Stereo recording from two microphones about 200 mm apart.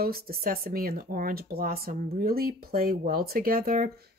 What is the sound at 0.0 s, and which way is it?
Speech, 50° right (ahead or behind).